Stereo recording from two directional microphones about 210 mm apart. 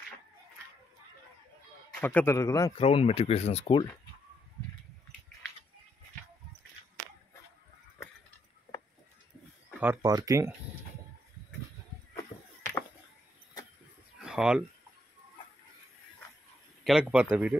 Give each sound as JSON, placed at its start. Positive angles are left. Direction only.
{"t": 2.0, "sound": "a man's voice", "side_deg": 10}
{"t": 2.8, "sound": "speech", "side_deg": 25}
{"t": 9.8, "sound": "speech", "side_deg": -15}
{"t": 14.2, "sound": "a sound", "side_deg": -5}
{"t": 16.8, "sound": "speech", "side_deg": -5}